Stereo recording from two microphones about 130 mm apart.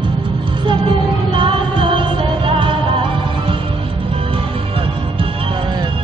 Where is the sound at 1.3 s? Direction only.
40° right (ahead or behind).